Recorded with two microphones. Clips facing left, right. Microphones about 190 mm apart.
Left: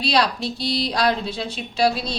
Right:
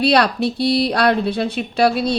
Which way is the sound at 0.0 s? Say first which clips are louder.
Right 6 dB; 60° right (ahead or behind).